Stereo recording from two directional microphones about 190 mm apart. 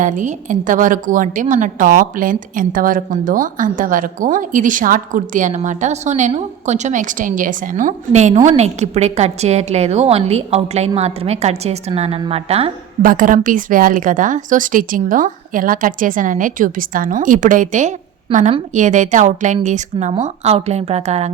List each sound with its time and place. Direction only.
0.0 s a woman's voice: 40° right (ahead or behind)
13.0 s a woman's voice: 45° right (ahead or behind)